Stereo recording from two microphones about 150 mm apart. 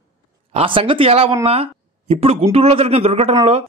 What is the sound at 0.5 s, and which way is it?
A man's voice, 40° right (ahead or behind).